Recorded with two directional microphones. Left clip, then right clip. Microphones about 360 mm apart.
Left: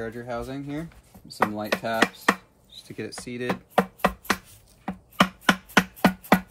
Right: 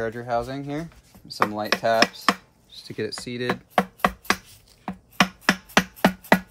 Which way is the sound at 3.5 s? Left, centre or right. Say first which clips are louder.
Right 1 dB; centre.